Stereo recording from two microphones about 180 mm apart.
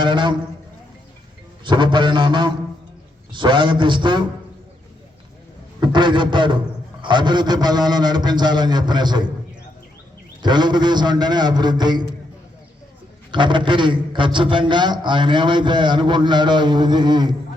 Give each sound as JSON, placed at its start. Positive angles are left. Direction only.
{"t": 0.0, "sound": "a sound", "side_deg": -25}
{"t": 1.6, "sound": "a man's voice", "side_deg": -25}
{"t": 5.8, "sound": "a man's voice", "side_deg": -25}
{"t": 10.4, "sound": "a man's voice", "side_deg": -25}
{"t": 13.3, "sound": "a man's voice", "side_deg": -25}